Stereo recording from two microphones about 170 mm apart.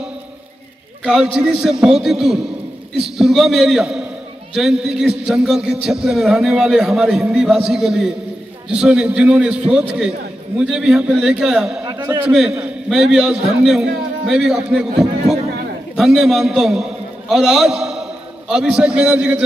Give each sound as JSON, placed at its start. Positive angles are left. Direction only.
{"t": 1.0, "sound": "a man's voice", "side_deg": -5}
{"t": 11.8, "sound": "a sound", "side_deg": -25}
{"t": 12.1, "sound": "a man's voice", "side_deg": -5}